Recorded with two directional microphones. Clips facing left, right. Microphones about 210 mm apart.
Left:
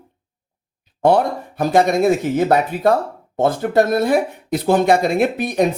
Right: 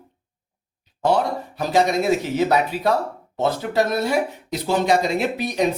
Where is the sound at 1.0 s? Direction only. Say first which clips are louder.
Left 5 dB; 55° left (ahead or behind).